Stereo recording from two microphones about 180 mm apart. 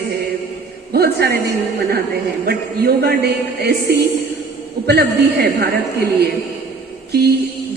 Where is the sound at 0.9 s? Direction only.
60° right (ahead or behind).